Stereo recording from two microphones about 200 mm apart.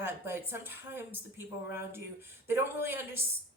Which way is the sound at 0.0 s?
10° right (ahead or behind).